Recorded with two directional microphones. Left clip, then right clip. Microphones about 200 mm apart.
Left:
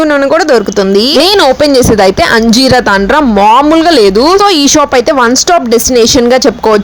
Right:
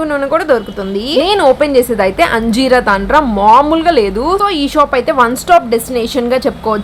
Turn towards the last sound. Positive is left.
turn(degrees=35)  # may be behind; listen again after turning